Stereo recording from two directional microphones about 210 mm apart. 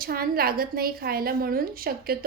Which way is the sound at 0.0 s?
45° right (ahead or behind).